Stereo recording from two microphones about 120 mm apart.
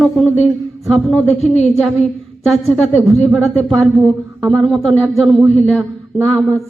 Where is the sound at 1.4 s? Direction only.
65° left (ahead or behind).